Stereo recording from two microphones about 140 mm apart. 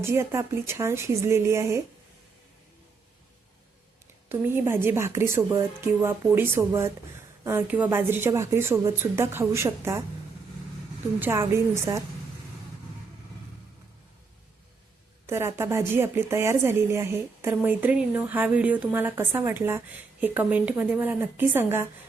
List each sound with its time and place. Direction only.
0.0 s a woman's voice: 20° right (ahead or behind)
4.3 s a woman's voice: 15° right (ahead or behind)
11.2 s a woman's voice: 15° right (ahead or behind)
15.3 s a woman's voice: 15° right (ahead or behind)